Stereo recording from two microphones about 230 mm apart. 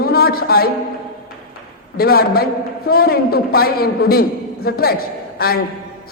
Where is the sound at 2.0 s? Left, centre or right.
Left.